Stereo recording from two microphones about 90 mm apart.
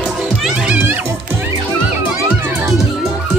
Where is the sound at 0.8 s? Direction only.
20° right (ahead or behind).